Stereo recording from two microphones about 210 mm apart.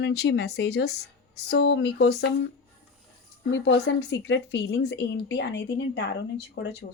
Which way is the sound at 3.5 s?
55° left (ahead or behind).